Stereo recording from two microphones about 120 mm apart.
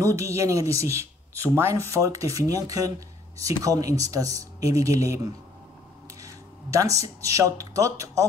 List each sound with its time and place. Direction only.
0.0 s speech: 25° right (ahead or behind)